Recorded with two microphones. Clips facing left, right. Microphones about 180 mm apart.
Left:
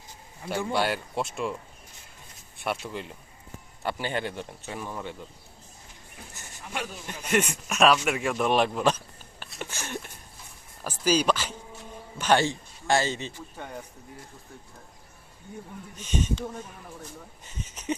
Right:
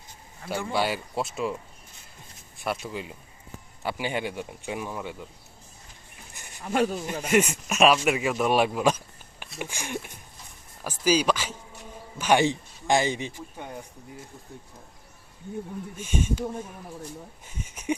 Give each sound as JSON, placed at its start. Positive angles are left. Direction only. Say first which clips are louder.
{"t": 0.7, "sound": "speech", "louder": "right 1 dB", "side_deg": 0}
{"t": 2.6, "sound": "speech", "louder": "right 1 dB", "side_deg": 0}
{"t": 6.7, "sound": "speech", "louder": "right 11 dB", "side_deg": -50}
{"t": 7.3, "sound": "speech", "louder": "right 3 dB", "side_deg": -10}
{"t": 16.0, "sound": "speech", "louder": "right 1 dB", "side_deg": -10}